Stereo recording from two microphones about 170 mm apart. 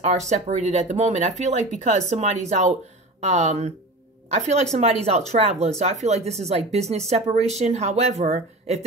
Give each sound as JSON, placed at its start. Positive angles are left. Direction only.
{"t": 0.3, "sound": "speech", "side_deg": -40}